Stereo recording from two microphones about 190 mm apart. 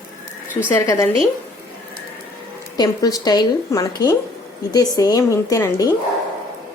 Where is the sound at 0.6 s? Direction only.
15° left (ahead or behind).